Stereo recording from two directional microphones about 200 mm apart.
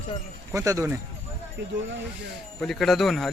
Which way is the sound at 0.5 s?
15° right (ahead or behind).